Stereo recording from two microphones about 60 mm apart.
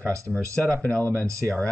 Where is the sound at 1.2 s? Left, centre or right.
Right.